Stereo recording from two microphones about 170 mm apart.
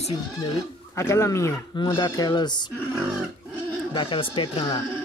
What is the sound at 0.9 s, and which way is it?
Speech, 15° left (ahead or behind).